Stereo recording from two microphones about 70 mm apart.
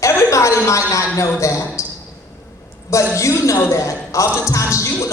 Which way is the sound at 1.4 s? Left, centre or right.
Left.